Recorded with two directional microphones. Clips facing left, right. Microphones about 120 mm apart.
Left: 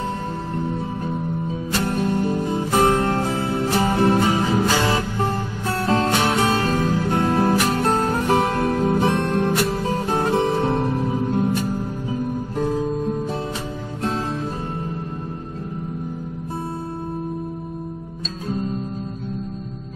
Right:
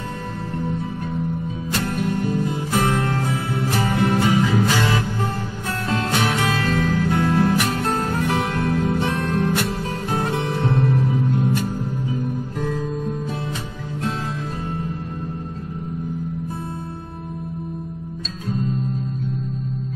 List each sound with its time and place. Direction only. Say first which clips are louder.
1.8 s music: left 2 dB; 30° left (ahead or behind)
12.6 s music: left 4 dB; 35° left (ahead or behind)